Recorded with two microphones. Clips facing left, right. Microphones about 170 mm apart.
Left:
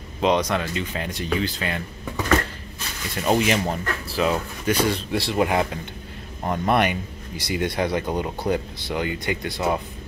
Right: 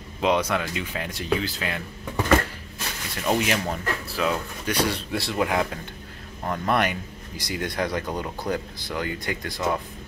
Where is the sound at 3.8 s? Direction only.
Centre (ahead or behind).